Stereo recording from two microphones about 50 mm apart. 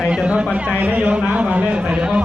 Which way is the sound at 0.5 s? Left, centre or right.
Right.